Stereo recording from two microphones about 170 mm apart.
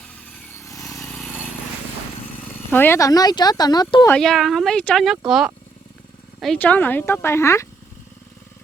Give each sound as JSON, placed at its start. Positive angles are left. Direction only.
{"t": 0.6, "sound": "vehicle", "side_deg": 20}
{"t": 1.0, "sound": "vehicle", "side_deg": 5}
{"t": 2.7, "sound": "speech", "side_deg": 15}
{"t": 4.1, "sound": "speech", "side_deg": 0}
{"t": 6.4, "sound": "speech", "side_deg": 5}